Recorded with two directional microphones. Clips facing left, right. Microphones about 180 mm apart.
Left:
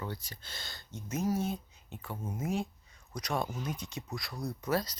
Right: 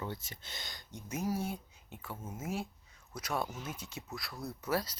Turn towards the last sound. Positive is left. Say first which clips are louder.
# left 2 dB
turn(degrees=-10)  # may be behind; listen again after turning